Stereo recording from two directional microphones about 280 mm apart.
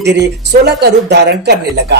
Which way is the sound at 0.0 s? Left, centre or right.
Right.